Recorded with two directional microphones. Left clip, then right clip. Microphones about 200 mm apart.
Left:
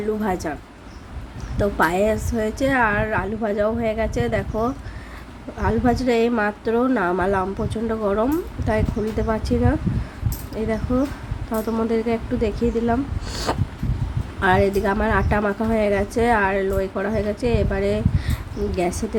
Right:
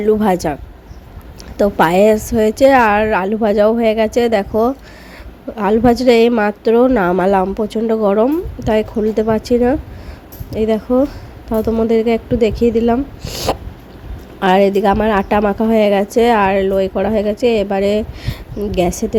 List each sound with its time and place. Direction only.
0.2 s a woman's voice: 40° right (ahead or behind)
1.5 s a woman's voice: 35° right (ahead or behind)